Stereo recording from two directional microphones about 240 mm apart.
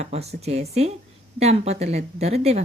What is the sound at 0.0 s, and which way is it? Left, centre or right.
Speech, right.